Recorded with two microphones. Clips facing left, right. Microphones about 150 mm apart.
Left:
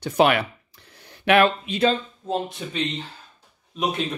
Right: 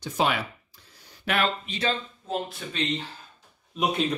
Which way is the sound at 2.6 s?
15° left (ahead or behind).